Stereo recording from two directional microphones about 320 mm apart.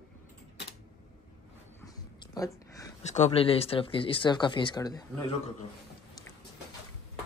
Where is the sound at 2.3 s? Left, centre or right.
Centre.